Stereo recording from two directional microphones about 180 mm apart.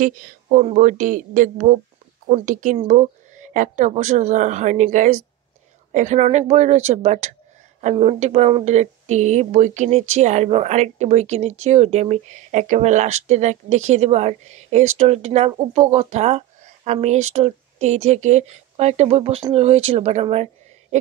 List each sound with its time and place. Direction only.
0.0 s a woman's voice: 50° right (ahead or behind)